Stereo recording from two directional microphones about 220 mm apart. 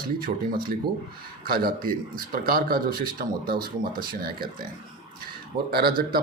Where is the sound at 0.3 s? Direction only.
40° right (ahead or behind).